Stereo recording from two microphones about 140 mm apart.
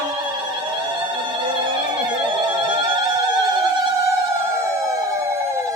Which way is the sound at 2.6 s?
35° right (ahead or behind).